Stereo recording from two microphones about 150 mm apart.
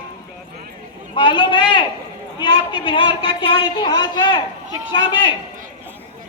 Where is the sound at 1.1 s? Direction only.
30° left (ahead or behind).